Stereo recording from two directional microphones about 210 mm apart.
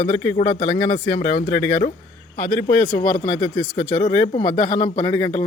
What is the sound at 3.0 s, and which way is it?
Speech, 20° left (ahead or behind).